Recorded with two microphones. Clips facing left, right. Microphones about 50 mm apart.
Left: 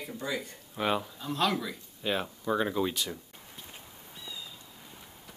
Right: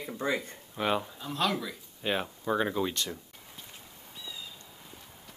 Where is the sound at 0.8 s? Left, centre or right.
Centre.